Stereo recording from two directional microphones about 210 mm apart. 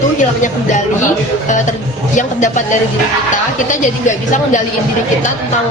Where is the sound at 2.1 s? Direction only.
35° left (ahead or behind).